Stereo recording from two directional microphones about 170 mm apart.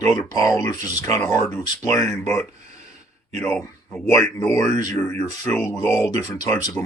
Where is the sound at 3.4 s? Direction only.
5° left (ahead or behind).